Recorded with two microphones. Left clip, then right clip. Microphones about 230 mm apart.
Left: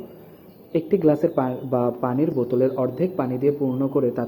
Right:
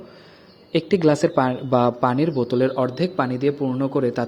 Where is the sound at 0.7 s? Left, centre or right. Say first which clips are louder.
Right 1 dB; right.